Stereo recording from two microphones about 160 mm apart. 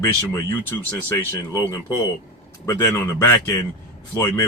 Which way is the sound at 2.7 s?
15° left (ahead or behind).